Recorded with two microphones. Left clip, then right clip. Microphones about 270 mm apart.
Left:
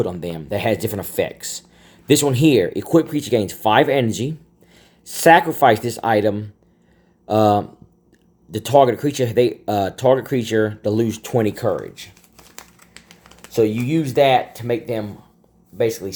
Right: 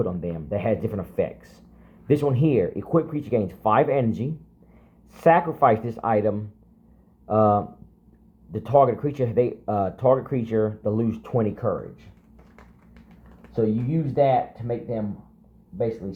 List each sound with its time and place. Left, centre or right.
0.0 s speech: left
14.2 s speech: left
16.0 s speech: left